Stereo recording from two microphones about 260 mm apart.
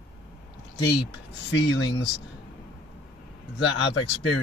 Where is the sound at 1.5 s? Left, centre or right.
Left.